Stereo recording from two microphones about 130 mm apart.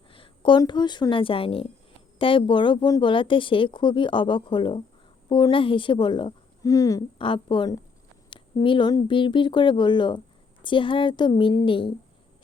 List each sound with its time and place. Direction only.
0.1 s a sound: 40° left (ahead or behind)
0.6 s speech: 35° left (ahead or behind)
6.6 s speech: 25° left (ahead or behind)
7.2 s speech: 40° left (ahead or behind)